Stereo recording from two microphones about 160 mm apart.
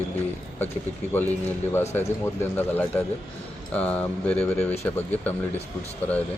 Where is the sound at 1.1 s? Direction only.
10° left (ahead or behind).